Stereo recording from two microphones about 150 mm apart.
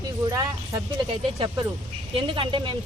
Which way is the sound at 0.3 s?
20° right (ahead or behind).